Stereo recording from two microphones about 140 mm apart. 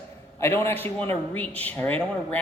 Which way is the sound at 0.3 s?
20° left (ahead or behind).